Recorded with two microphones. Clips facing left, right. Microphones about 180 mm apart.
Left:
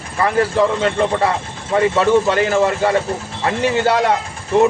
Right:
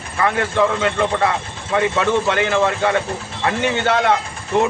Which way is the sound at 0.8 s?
35° left (ahead or behind).